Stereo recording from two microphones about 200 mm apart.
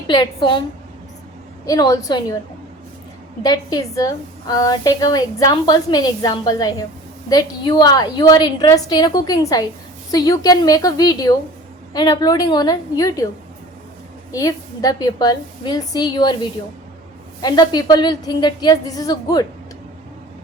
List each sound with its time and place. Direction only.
0.1 s a woman's voice: 20° left (ahead or behind)
1.6 s a woman's voice: 15° left (ahead or behind)
3.4 s a woman's voice: 20° left (ahead or behind)
14.3 s a woman's voice: 20° left (ahead or behind)